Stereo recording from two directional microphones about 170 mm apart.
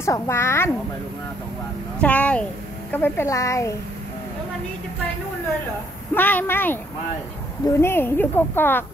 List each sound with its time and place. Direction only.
0.0 s speech: 15° left (ahead or behind)
2.0 s speech: 10° left (ahead or behind)
6.1 s speech: 10° left (ahead or behind)